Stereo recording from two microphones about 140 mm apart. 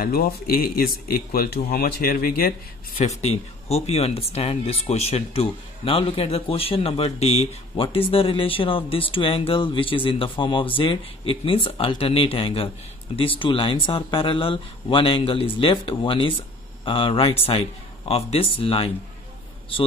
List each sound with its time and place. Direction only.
0.0 s speech: 90° left
3.2 s speech: 50° left (ahead or behind)